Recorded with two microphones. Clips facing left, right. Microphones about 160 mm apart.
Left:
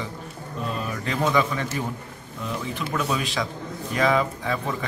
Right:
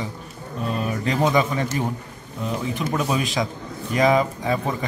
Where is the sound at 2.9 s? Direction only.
30° right (ahead or behind).